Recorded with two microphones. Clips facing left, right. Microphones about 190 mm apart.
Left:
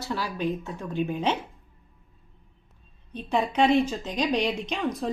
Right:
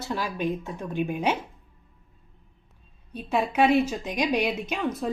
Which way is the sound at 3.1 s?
10° right (ahead or behind).